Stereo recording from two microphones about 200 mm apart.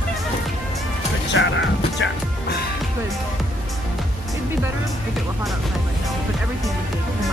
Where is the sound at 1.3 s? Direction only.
65° left (ahead or behind).